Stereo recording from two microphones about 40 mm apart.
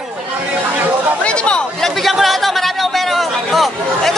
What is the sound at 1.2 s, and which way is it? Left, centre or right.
Speech, left.